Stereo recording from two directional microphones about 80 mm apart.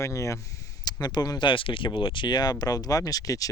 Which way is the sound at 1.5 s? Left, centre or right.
Left.